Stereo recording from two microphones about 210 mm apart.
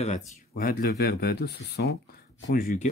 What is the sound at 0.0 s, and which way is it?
Speech, 35° left (ahead or behind).